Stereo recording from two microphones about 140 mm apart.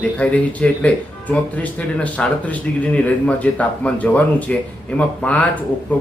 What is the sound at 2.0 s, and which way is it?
Speech, 10° left (ahead or behind).